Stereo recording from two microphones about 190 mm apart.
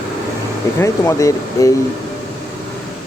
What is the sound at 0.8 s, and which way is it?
Speech, 15° left (ahead or behind).